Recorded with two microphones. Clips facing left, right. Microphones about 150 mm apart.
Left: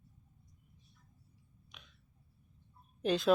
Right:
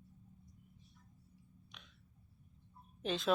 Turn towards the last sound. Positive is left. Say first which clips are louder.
# left 6 dB
turn(degrees=0)  # may be behind; listen again after turning